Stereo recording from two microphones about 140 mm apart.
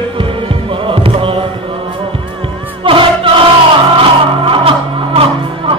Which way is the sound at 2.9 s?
40° right (ahead or behind).